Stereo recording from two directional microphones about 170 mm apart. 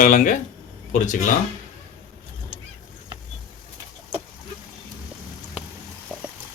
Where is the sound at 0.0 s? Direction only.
50° left (ahead or behind).